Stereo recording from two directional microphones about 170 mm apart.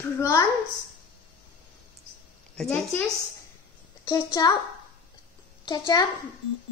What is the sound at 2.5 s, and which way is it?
Speech, 5° left (ahead or behind).